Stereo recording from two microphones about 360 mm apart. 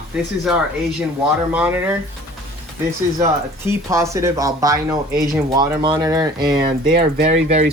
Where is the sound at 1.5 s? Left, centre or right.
Centre.